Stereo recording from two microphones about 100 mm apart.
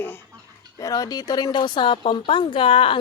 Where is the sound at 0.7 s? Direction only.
35° left (ahead or behind).